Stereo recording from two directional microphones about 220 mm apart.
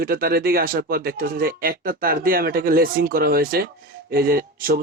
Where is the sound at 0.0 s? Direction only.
45° right (ahead or behind).